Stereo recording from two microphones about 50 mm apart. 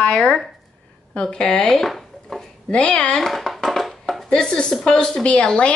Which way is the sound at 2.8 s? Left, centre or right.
Centre.